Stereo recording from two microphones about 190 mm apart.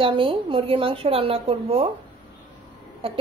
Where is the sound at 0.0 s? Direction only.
25° right (ahead or behind).